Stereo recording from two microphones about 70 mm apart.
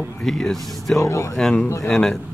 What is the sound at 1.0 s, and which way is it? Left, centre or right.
Speech, left.